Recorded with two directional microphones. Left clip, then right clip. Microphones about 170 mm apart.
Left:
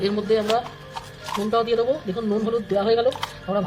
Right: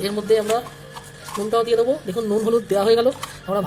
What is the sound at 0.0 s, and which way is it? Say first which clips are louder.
Speech: right 2 dB; 25° right (ahead or behind).